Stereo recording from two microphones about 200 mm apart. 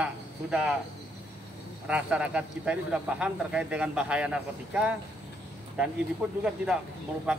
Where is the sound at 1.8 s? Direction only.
5° right (ahead or behind).